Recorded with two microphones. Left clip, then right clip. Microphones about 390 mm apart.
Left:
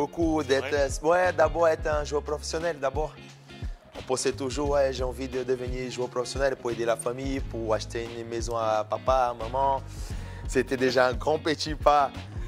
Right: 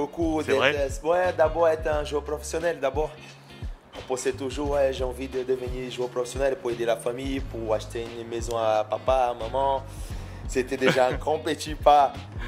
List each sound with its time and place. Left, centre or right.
0.0 s music: left
4.1 s speech: left
6.8 s music: left
10.5 s speech: left